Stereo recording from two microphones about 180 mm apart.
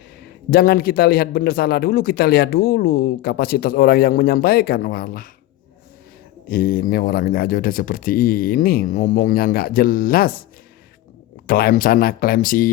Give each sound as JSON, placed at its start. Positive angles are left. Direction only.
{"t": 0.2, "sound": "speech", "side_deg": 55}
{"t": 6.5, "sound": "speech", "side_deg": 55}
{"t": 11.4, "sound": "speech", "side_deg": 55}